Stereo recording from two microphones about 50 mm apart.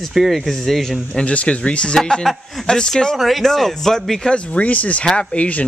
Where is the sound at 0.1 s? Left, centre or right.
Centre.